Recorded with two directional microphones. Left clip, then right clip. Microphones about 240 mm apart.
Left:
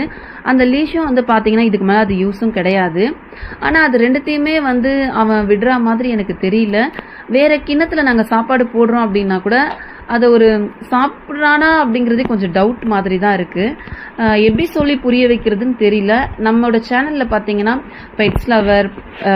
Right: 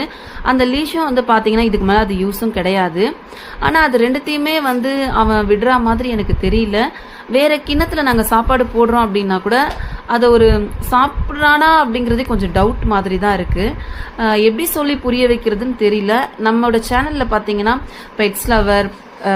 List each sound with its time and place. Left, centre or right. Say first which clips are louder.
0.0 s a woman's voice: right 1 dB; centre